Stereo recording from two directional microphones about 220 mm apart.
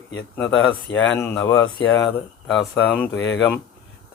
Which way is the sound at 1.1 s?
10° left (ahead or behind).